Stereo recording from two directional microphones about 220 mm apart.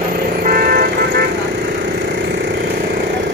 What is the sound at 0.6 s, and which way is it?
Vehicle, 40° right (ahead or behind).